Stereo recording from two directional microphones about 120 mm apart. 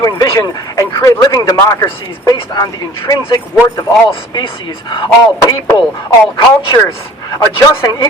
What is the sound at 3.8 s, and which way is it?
Speech, 40° left (ahead or behind).